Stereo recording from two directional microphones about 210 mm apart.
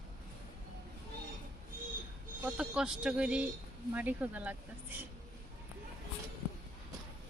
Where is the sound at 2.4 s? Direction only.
5° right (ahead or behind).